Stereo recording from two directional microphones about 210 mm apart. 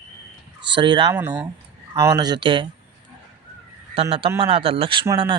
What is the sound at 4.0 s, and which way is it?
Speech, 25° right (ahead or behind).